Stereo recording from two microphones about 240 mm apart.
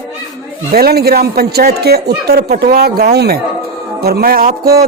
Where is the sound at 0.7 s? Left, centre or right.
Right.